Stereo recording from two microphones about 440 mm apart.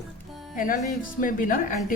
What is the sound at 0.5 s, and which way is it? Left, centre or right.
A woman's voice, centre.